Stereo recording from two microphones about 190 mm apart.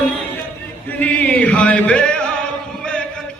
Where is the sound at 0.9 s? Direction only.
10° left (ahead or behind).